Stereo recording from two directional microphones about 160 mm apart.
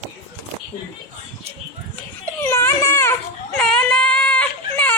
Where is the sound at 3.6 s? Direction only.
5° left (ahead or behind).